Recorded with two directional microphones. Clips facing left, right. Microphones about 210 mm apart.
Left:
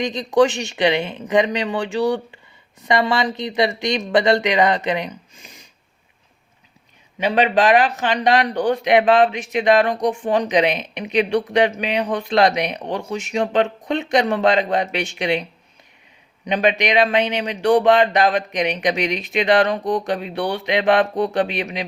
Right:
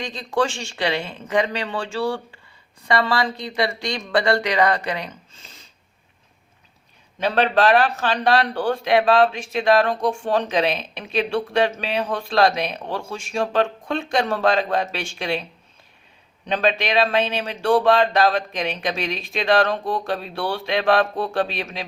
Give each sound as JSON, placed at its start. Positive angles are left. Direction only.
{"t": 0.0, "sound": "a man's voice", "side_deg": 20}
{"t": 7.2, "sound": "a man's voice", "side_deg": 15}
{"t": 16.5, "sound": "speech", "side_deg": 15}